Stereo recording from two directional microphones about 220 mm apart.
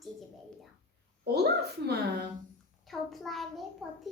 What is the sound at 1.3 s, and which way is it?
Speech, 45° right (ahead or behind).